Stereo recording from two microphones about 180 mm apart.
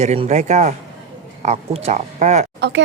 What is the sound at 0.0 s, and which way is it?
Speech, 40° right (ahead or behind).